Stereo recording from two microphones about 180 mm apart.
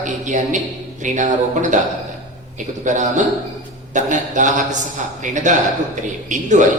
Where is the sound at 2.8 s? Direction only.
45° right (ahead or behind).